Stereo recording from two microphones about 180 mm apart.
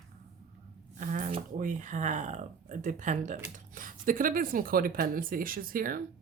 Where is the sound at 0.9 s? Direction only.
45° right (ahead or behind).